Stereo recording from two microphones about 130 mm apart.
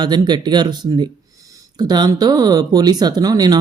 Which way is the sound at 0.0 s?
35° right (ahead or behind).